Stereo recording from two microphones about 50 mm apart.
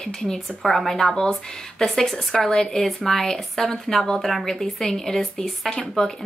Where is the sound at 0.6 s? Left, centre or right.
Centre.